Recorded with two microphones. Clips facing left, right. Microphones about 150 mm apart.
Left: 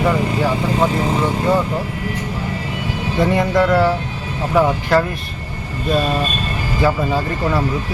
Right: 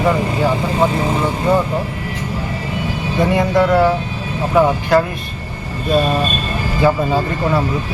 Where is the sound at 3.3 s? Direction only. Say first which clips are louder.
Right 2 dB; 20° right (ahead or behind).